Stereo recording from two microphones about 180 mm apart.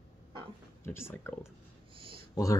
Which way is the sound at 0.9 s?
15° left (ahead or behind).